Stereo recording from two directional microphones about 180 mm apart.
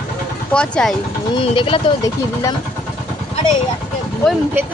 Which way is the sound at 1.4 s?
30° left (ahead or behind).